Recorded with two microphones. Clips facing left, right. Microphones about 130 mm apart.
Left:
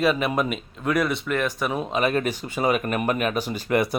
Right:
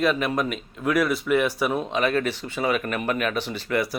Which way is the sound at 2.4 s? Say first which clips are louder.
Left 2 dB; 40° left (ahead or behind).